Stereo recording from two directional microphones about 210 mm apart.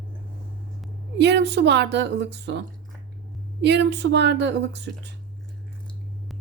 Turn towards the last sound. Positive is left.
turn(degrees=-55)  # may be behind; listen again after turning